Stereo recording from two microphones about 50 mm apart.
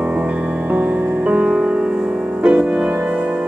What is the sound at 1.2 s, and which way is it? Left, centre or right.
Music, right.